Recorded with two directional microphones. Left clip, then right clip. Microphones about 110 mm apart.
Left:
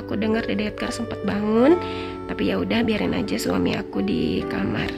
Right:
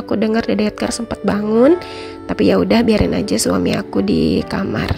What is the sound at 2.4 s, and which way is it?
A woman's voice, 60° right (ahead or behind).